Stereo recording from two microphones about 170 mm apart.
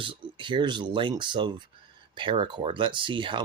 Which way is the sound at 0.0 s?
30° right (ahead or behind).